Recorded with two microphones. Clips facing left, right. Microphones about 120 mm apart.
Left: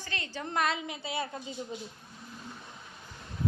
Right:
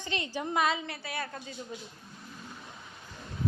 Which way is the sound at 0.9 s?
25° left (ahead or behind).